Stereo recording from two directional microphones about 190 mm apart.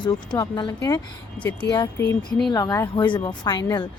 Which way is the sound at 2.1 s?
5° left (ahead or behind).